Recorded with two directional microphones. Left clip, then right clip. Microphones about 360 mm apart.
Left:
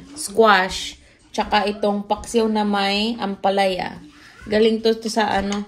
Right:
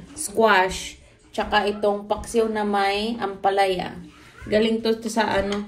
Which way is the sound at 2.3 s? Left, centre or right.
Left.